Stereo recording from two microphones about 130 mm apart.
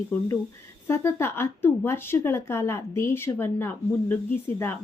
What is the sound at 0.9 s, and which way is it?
A woman's voice, 20° left (ahead or behind).